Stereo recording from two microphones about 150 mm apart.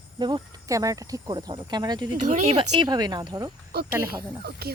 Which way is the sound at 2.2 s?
55° right (ahead or behind).